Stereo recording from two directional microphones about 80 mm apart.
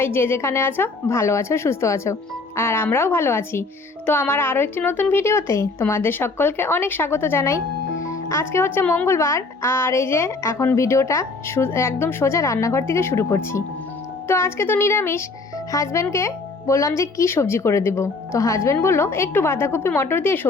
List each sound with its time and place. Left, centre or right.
0.0 s speech: left
9.0 s speech: left